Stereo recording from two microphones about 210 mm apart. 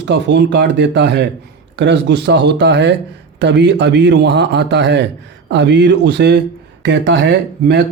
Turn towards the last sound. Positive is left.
turn(degrees=-55)  # may be behind; listen again after turning